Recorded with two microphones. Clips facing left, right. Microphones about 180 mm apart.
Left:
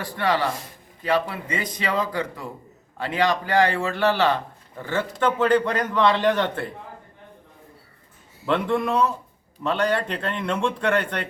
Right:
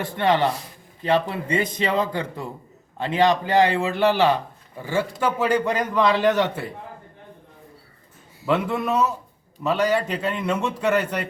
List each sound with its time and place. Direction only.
0.0 s a man's voice: 20° right (ahead or behind); by 6.7 s 5° right (ahead or behind)
8.4 s a man's voice: 5° right (ahead or behind)